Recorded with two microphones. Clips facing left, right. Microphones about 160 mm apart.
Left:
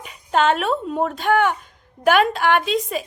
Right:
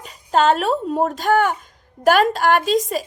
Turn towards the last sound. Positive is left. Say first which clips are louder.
# right 2 dB
turn(degrees=-40)  # may be behind; listen again after turning